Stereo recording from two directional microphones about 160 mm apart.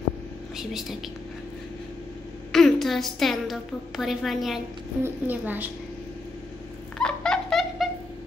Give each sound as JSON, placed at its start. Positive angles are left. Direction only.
{"t": 0.6, "sound": "a woman's voice", "side_deg": 0}
{"t": 2.5, "sound": "a woman's voice", "side_deg": 0}
{"t": 5.0, "sound": "a woman's voice", "side_deg": -10}
{"t": 7.0, "sound": "giggle", "side_deg": 5}